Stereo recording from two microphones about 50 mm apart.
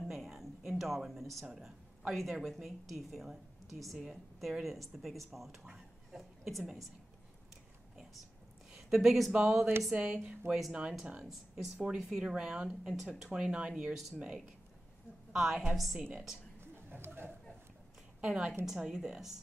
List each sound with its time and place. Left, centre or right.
0.0 s a sound: centre
1.5 s a sound: centre
2.1 s a woman's voice: centre
8.7 s speech: centre
13.3 s speech: centre
15.3 s a woman's voice: centre
16.1 s speech: centre
16.9 s speech: right
18.2 s a woman's voice: centre